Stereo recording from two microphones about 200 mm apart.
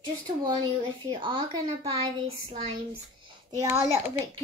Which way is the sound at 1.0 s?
25° right (ahead or behind).